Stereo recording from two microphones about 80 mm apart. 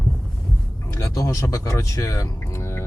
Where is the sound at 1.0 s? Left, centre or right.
Left.